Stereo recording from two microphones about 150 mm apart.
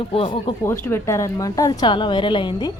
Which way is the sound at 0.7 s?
15° left (ahead or behind).